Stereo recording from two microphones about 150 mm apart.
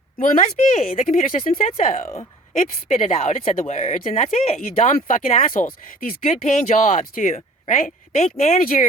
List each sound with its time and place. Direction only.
0.2 s speech: 55° left (ahead or behind)
1.8 s speech: 50° left (ahead or behind); by 6.1 s 65° left (ahead or behind)
6.2 s speech: 50° left (ahead or behind)
8.5 s speech: 65° left (ahead or behind)